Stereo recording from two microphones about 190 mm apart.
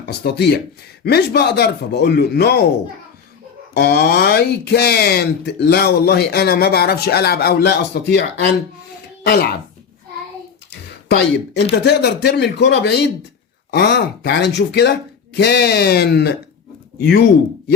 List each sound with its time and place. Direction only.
0.0 s speech: 60° left (ahead or behind)
3.8 s speech: 55° left (ahead or behind)
11.1 s speech: 60° left (ahead or behind)